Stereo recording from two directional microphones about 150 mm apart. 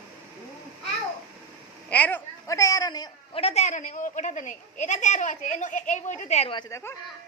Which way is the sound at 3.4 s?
45° left (ahead or behind).